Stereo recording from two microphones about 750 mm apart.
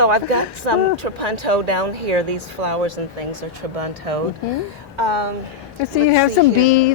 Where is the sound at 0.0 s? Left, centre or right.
Right.